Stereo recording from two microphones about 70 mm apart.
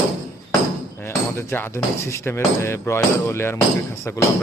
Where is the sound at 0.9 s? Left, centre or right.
Left.